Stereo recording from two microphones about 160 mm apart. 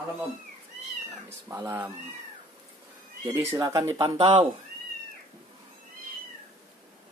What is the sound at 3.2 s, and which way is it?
Speech, 20° right (ahead or behind).